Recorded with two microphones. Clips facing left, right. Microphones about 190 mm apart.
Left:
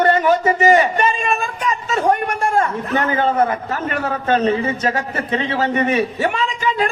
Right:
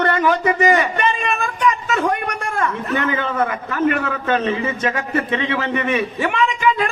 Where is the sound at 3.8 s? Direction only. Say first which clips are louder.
Right 4 dB; 35° left (ahead or behind).